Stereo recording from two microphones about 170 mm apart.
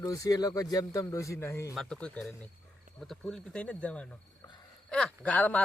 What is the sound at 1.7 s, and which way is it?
Speech, 5° left (ahead or behind).